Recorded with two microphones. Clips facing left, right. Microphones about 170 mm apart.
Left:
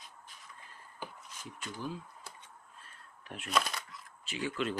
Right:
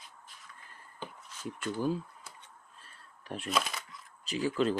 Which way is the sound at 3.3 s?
35° right (ahead or behind).